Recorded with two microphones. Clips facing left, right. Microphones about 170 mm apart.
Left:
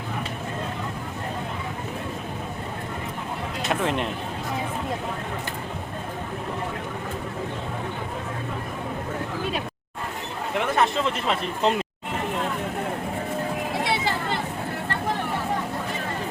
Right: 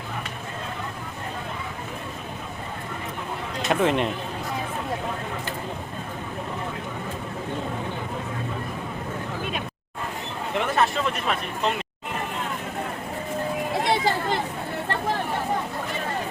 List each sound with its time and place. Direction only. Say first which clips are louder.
3.7 s speech: right 4 dB; centre (ahead or behind)
10.6 s speech: left 1 dB; 20° left (ahead or behind)